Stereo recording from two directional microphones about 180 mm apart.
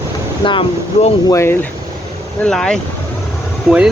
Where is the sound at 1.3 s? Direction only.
15° left (ahead or behind).